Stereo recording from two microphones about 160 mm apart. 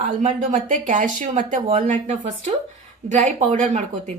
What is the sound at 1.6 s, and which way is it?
A woman's voice, 45° right (ahead or behind).